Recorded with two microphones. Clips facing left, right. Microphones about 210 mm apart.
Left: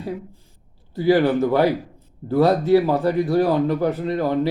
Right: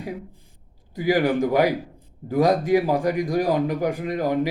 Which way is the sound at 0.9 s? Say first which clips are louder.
Left 3 dB; 15° right (ahead or behind).